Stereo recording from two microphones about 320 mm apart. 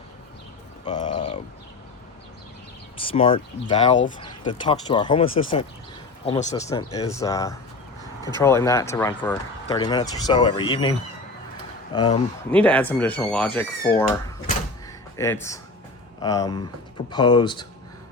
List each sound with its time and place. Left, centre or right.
0.9 s a sound: centre
3.0 s speech: centre
11.9 s speech: centre
12.5 s speech: centre
15.1 s speech: centre